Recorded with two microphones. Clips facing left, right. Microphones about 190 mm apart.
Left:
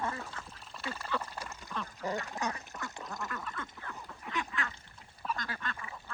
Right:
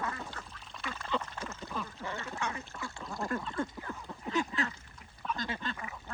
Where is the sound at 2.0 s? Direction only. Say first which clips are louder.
Left 6 dB; 40° left (ahead or behind).